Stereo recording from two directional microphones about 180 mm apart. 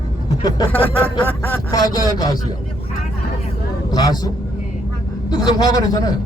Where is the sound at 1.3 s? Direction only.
15° left (ahead or behind).